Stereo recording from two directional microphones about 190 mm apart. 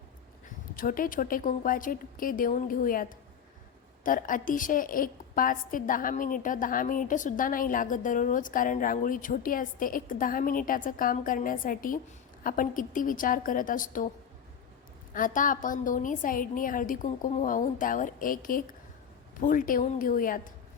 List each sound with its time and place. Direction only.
0.4 s a woman's voice: 45° left (ahead or behind)
15.1 s a woman's voice: 45° left (ahead or behind)